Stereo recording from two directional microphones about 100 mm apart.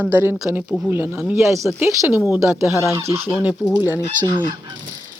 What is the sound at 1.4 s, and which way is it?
Speech, 30° right (ahead or behind).